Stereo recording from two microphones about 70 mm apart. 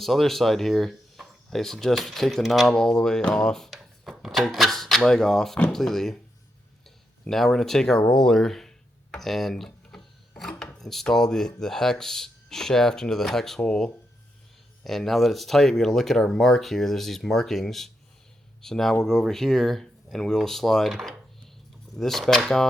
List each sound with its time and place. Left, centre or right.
0.0 s speech: centre
7.3 s speech: centre
9.1 s rub: centre
10.6 s a sound: centre
11.1 s speech: centre